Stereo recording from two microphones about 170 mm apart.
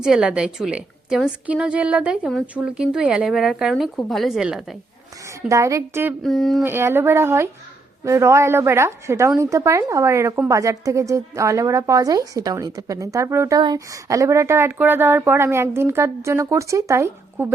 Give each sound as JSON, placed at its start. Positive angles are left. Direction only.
{"t": 0.0, "sound": "a woman's voice", "side_deg": -5}
{"t": 5.5, "sound": "speech", "side_deg": -20}
{"t": 6.2, "sound": "a woman's voice", "side_deg": 0}
{"t": 6.6, "sound": "a woman's voice", "side_deg": -15}